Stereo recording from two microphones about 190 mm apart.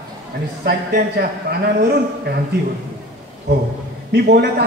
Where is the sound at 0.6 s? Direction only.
55° right (ahead or behind).